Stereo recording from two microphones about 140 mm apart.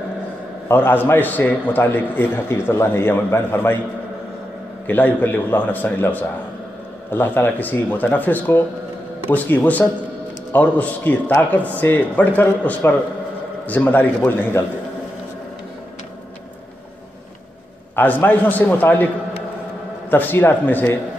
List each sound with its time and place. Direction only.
0.7 s a man's voice: 15° left (ahead or behind)
4.8 s a man's voice: 15° left (ahead or behind)
17.9 s a man's voice: 15° left (ahead or behind)
20.1 s a man's voice: 15° left (ahead or behind)